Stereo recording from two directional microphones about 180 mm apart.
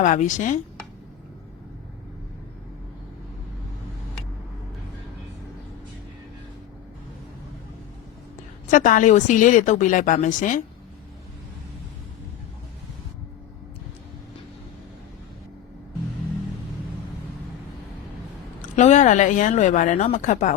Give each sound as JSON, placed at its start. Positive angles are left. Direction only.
{"t": 0.0, "sound": "a woman's voice", "side_deg": 45}
{"t": 8.7, "sound": "a woman's voice", "side_deg": 45}
{"t": 18.8, "sound": "a woman's voice", "side_deg": 40}